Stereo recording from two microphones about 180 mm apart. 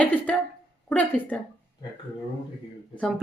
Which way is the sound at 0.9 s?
10° left (ahead or behind).